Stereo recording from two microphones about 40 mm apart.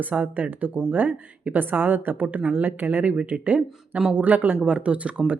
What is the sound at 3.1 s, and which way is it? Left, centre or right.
Speech, right.